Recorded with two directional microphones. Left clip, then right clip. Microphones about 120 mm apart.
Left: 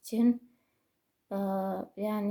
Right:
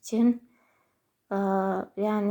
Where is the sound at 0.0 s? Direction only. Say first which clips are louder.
Right 3 dB; 15° left (ahead or behind).